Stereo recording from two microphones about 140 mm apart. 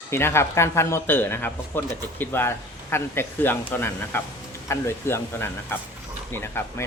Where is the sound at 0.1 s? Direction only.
20° left (ahead or behind).